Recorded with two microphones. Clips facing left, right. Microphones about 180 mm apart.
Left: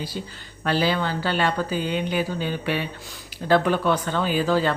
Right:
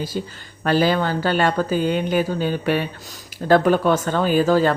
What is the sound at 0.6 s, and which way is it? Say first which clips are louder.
Speech: right 4 dB; 45° right (ahead or behind).